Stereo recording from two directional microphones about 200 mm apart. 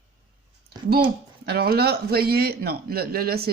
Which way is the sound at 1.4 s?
55° right (ahead or behind).